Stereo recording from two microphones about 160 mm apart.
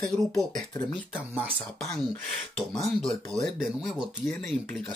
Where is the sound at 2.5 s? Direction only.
5° left (ahead or behind).